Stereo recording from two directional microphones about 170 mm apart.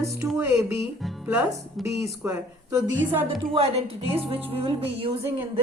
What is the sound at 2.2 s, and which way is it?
Speech, 15° right (ahead or behind).